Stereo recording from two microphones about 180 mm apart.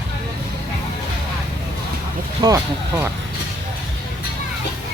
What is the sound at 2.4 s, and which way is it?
Speech, 15° right (ahead or behind).